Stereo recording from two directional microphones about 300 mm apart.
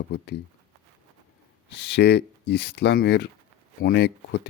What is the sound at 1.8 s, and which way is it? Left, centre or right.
Speech, left.